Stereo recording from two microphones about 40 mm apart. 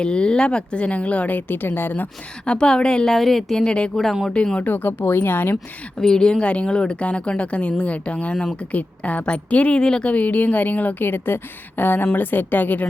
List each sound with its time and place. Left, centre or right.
0.0 s speech: left
1.4 s speech: left
2.5 s speech: left
3.1 s speech: centre
3.6 s speech: left
4.6 s speech: left
6.0 s a woman's voice: centre
6.4 s speech: left
9.7 s speech: left
10.1 s speech: left
11.0 s speech: left